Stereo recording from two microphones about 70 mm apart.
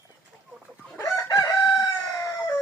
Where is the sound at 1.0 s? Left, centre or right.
Left.